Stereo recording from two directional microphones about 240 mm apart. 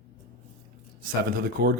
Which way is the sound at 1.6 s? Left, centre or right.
Right.